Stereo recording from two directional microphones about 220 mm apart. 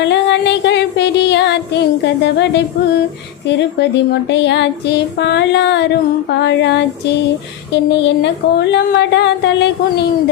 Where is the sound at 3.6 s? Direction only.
50° left (ahead or behind).